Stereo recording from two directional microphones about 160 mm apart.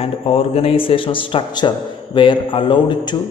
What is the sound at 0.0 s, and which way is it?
A man's voice, 40° left (ahead or behind).